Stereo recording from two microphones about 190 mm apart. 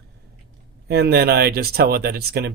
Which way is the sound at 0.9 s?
60° right (ahead or behind).